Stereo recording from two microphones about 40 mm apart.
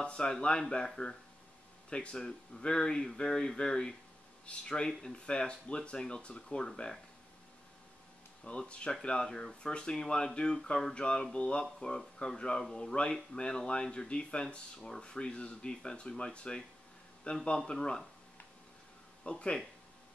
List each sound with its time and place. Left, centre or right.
0.0 s speech: left
8.5 s speech: left
17.6 s speech: centre
19.2 s speech: left